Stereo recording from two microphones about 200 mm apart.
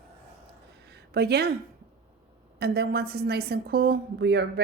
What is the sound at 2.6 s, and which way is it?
A woman's voice, 50° right (ahead or behind).